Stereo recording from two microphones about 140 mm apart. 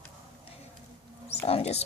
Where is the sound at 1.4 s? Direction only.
45° left (ahead or behind).